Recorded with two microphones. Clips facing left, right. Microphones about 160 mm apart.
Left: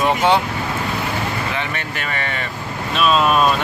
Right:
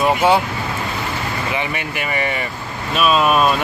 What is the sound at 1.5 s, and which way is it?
Speech, 10° right (ahead or behind).